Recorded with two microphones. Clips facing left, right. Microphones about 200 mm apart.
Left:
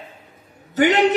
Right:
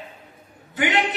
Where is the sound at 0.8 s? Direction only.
40° left (ahead or behind).